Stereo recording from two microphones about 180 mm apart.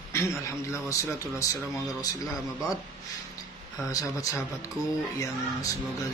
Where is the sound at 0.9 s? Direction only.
15° left (ahead or behind).